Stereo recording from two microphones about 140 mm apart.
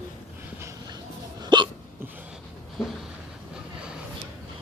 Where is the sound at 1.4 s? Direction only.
30° right (ahead or behind).